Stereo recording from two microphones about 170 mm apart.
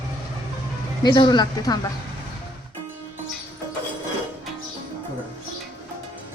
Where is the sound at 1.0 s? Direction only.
25° left (ahead or behind).